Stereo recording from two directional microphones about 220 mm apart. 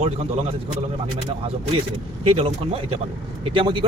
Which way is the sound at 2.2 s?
25° right (ahead or behind).